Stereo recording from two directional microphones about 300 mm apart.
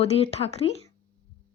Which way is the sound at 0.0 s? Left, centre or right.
Left.